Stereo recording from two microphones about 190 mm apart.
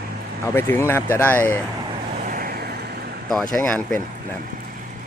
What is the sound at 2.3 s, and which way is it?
Vehicle, 50° right (ahead or behind).